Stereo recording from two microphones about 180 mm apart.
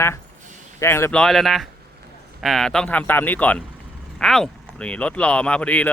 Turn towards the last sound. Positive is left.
turn(degrees=5)  # may be behind; listen again after turning